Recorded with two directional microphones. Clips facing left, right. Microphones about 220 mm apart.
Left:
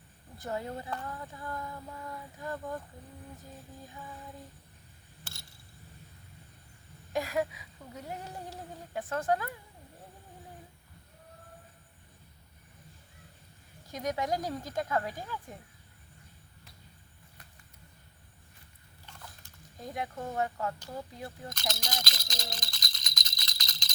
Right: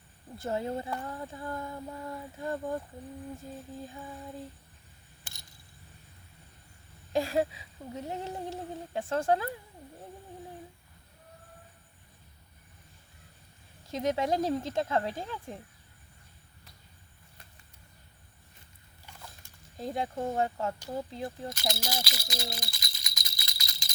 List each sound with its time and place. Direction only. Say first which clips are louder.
0.3 s speech: right 4 dB; 25° right (ahead or behind)
3.8 s speech: right 4 dB; 30° right (ahead or behind)
5.2 s a sound: left 3 dB; 15° right (ahead or behind)
7.1 s speech: right 3 dB; 30° right (ahead or behind)
13.9 s speech: right 4 dB; 25° right (ahead or behind)
19.8 s speech: right 5 dB; 30° right (ahead or behind)
21.5 s rattle: right 3 dB; 10° right (ahead or behind)